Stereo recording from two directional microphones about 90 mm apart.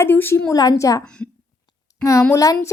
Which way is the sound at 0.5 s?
45° left (ahead or behind).